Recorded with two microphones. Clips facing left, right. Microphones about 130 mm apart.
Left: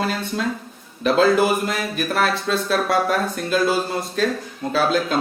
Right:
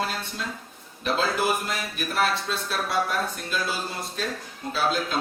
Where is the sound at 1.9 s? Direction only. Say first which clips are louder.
Left 3 dB; 60° left (ahead or behind).